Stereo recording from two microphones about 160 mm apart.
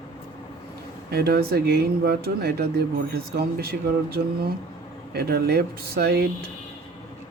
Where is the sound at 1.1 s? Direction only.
80° right.